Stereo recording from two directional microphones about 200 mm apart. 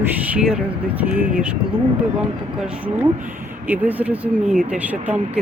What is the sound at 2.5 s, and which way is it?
Speech, 5° right (ahead or behind).